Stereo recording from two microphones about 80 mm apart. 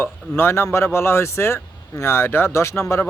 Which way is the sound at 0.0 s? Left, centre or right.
Left.